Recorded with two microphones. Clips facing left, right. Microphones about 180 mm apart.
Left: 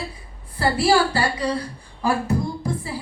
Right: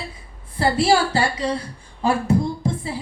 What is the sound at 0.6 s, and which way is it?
A woman's voice, 25° right (ahead or behind).